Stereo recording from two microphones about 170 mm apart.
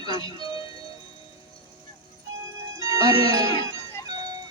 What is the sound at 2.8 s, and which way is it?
Speech, 20° right (ahead or behind).